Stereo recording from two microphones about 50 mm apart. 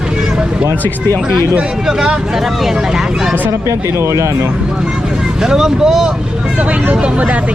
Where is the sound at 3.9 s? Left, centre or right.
Right.